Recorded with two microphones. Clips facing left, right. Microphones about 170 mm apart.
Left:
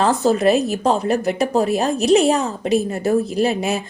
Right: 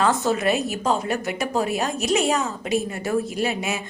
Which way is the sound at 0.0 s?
35° left (ahead or behind).